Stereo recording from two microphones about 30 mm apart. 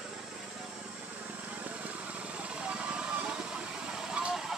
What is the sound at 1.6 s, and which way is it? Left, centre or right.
Vehicle, right.